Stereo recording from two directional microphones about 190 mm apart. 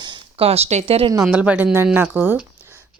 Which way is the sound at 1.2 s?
5° right (ahead or behind).